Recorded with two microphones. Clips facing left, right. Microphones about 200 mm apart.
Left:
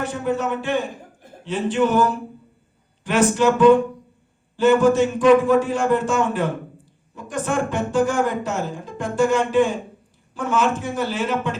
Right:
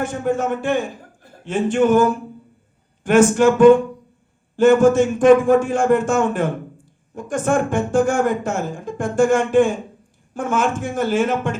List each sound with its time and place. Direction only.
0.0 s speech: 50° right (ahead or behind)